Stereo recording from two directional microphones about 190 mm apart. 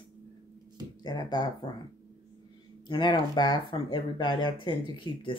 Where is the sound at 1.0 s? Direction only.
20° left (ahead or behind).